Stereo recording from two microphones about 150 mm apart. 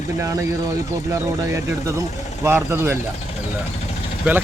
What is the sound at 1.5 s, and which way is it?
Speech, 20° right (ahead or behind).